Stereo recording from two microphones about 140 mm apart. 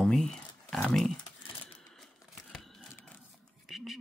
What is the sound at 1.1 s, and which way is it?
Crumpling, 40° left (ahead or behind).